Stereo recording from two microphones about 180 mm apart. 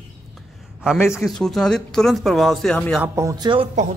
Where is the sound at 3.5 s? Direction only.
35° right (ahead or behind).